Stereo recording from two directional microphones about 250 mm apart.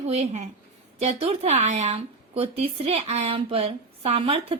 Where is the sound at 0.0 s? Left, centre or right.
Right.